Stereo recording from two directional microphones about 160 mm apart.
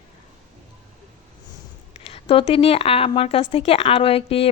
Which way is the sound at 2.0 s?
40° left (ahead or behind).